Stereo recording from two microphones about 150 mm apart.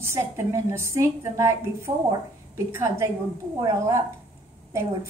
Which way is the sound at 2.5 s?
20° right (ahead or behind).